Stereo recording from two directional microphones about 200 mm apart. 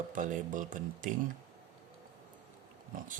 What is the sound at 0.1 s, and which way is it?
Speech, 40° right (ahead or behind).